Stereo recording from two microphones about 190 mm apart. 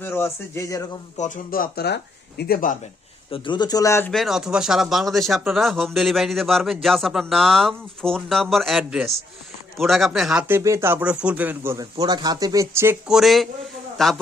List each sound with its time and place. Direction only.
0.0 s speech: 10° left (ahead or behind)
1.1 s speech: 45° left (ahead or behind)
3.3 s speech: 25° left (ahead or behind)
4.1 s speech: centre (ahead or behind)
10.5 s speech: 15° right (ahead or behind)
13.1 s speech: centre (ahead or behind)